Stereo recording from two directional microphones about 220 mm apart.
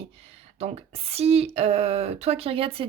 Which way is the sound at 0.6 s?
30° right (ahead or behind).